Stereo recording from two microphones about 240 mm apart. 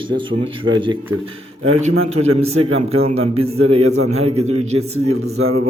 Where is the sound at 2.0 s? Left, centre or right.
Right.